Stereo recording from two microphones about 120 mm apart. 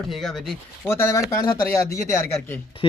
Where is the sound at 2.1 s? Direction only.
20° left (ahead or behind).